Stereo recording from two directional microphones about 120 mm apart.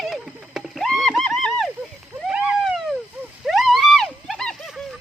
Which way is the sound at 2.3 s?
10° right (ahead or behind).